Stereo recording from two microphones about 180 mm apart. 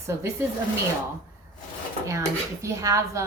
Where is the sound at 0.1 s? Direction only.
15° right (ahead or behind).